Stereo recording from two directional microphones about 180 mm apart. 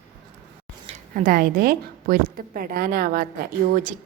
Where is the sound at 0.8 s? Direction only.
45° right (ahead or behind).